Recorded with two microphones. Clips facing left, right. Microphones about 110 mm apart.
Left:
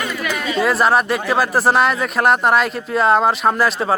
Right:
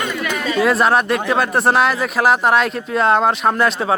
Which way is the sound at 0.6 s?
Centre (ahead or behind).